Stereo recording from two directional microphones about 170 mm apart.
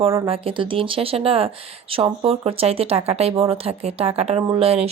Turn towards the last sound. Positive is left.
turn(degrees=-35)  # may be behind; listen again after turning